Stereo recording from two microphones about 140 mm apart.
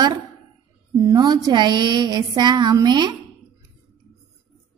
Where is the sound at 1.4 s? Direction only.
30° right (ahead or behind).